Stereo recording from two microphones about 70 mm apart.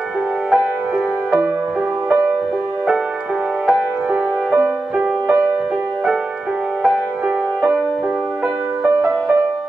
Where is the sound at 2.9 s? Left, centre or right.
Centre; by 5.6 s right.